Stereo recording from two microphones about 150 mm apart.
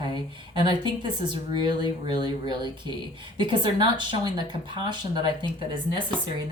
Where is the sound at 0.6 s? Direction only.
30° right (ahead or behind).